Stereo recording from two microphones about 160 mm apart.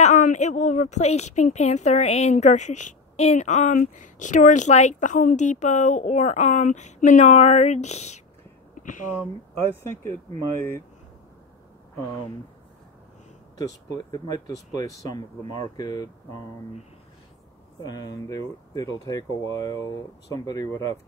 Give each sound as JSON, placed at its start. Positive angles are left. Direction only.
{"t": 0.0, "sound": "a woman's voice", "side_deg": 50}
{"t": 9.6, "sound": "speech", "side_deg": 15}
{"t": 13.9, "sound": "speech", "side_deg": 25}
{"t": 17.8, "sound": "speech", "side_deg": 25}